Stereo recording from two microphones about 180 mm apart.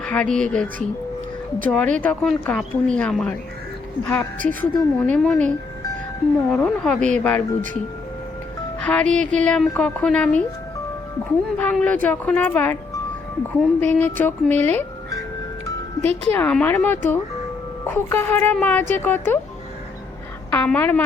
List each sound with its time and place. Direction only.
0.0 s speech: 5° left (ahead or behind)
4.4 s a woman's voice: 10° left (ahead or behind)
6.5 s speech: 5° left (ahead or behind)
8.8 s a woman's voice: 5° left (ahead or behind)
11.5 s a woman's voice: 5° left (ahead or behind)
13.7 s a woman's voice: 10° left (ahead or behind)
16.0 s speech: 35° right (ahead or behind)
16.3 s a woman's voice: 10° left (ahead or behind)
20.5 s a woman's voice: 10° left (ahead or behind)